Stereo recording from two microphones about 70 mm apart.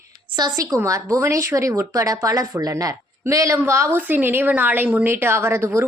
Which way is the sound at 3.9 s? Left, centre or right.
Right.